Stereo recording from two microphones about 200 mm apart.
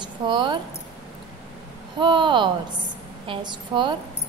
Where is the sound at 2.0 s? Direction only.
25° right (ahead or behind).